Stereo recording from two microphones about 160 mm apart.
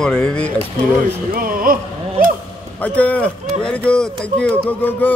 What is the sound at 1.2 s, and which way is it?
Speech, 60° right (ahead or behind).